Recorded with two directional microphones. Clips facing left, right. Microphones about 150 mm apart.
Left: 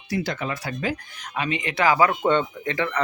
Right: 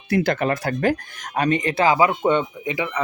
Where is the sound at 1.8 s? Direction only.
20° right (ahead or behind).